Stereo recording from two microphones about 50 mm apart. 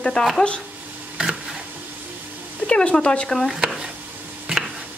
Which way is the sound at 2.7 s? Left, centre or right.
Left.